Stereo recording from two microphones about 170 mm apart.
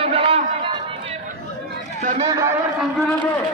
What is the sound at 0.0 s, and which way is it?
Run, 35° right (ahead or behind).